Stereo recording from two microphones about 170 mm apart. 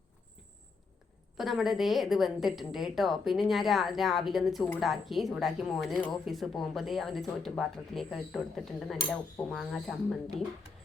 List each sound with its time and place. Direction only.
1.4 s speech: centre (ahead or behind)
9.0 s speech: 15° left (ahead or behind)
9.5 s speech: centre (ahead or behind)